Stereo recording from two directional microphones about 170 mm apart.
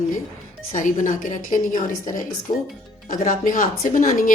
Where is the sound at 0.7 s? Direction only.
50° left (ahead or behind).